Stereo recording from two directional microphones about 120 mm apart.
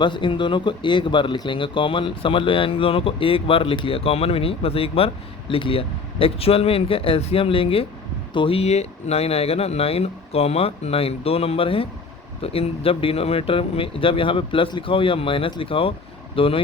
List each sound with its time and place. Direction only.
0.0 s speech: 40° left (ahead or behind)